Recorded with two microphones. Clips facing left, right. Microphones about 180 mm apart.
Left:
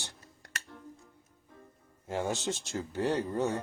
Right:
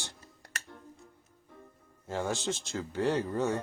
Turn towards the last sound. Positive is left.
turn(degrees=15)  # may be behind; listen again after turning